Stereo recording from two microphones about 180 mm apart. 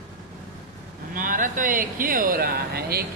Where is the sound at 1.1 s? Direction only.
50° right (ahead or behind).